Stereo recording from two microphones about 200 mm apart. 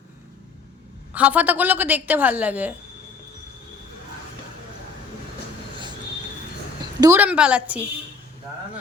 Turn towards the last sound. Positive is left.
turn(degrees=-5)  # may be behind; listen again after turning